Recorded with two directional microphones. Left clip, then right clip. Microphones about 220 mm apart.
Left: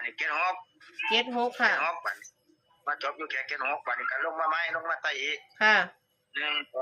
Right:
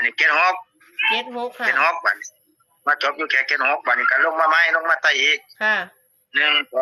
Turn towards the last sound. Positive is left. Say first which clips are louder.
# right 13 dB
turn(degrees=-35)  # may be behind; listen again after turning